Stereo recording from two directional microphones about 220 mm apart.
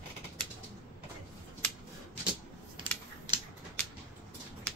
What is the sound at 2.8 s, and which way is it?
Scissors, 20° right (ahead or behind).